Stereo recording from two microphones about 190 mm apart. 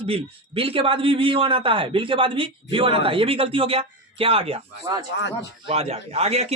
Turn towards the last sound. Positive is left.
turn(degrees=-35)  # may be behind; listen again after turning